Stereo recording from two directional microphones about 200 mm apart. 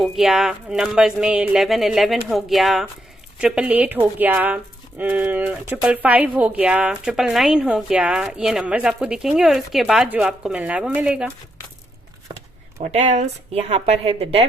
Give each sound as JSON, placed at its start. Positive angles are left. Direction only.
{"t": 0.0, "sound": "speech", "side_deg": 0}
{"t": 12.8, "sound": "a woman's voice", "side_deg": -35}